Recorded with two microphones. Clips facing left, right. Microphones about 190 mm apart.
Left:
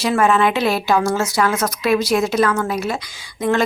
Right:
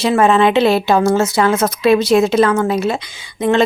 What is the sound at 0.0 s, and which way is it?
A woman's voice, 25° right (ahead or behind).